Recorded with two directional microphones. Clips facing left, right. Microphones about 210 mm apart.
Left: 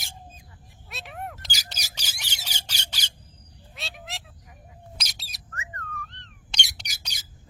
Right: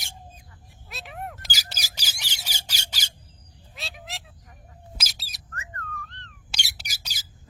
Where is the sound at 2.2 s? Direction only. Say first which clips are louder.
Even; 10° right (ahead or behind).